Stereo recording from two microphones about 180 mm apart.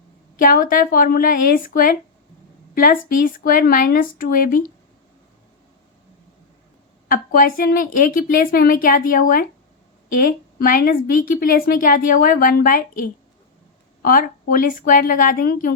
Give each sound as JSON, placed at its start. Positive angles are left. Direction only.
{"t": 0.3, "sound": "a woman's voice", "side_deg": 50}
{"t": 7.1, "sound": "a woman's voice", "side_deg": 50}